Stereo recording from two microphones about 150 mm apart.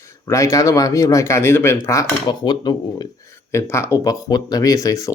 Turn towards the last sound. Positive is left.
turn(degrees=25)  # may be behind; listen again after turning